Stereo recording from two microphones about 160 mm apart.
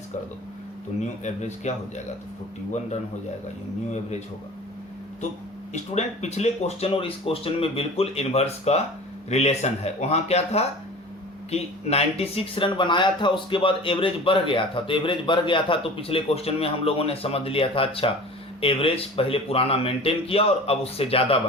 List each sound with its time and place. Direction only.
1.2 s speech: 45° left (ahead or behind)
5.7 s speech: 45° left (ahead or behind)